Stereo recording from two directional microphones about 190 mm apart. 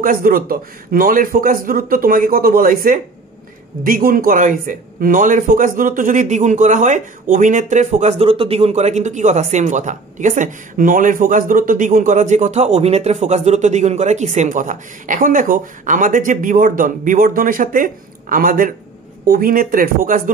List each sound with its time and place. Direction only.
0.0 s speech: 50° right (ahead or behind)